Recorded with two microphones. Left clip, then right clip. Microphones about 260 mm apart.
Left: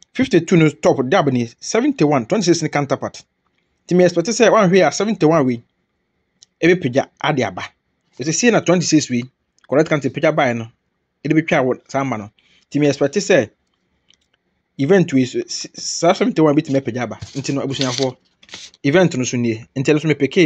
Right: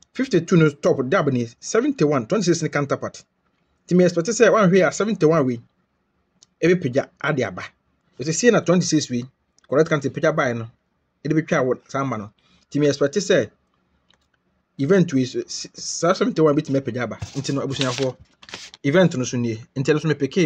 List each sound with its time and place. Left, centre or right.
0.1 s speech: centre
6.6 s speech: centre
14.8 s speech: centre